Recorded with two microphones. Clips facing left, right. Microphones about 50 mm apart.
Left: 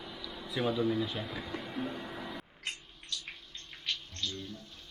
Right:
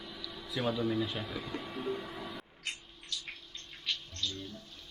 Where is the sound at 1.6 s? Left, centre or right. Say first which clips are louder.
Right 2 dB; centre.